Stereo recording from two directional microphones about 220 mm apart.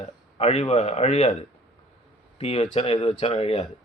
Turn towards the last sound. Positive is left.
turn(degrees=25)  # may be behind; listen again after turning